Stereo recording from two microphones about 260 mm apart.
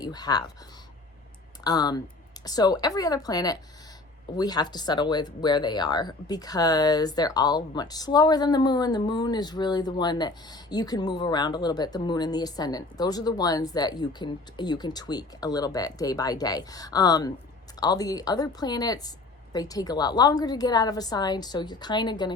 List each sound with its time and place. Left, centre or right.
0.0 s speech: centre
1.6 s speech: centre